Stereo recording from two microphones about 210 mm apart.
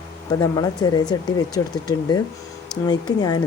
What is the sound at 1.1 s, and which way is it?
Speech, 20° left (ahead or behind).